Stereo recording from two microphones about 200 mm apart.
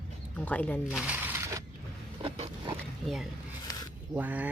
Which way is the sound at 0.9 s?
5° right (ahead or behind).